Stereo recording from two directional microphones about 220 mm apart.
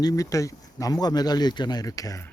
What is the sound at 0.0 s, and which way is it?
Speech, 15° left (ahead or behind).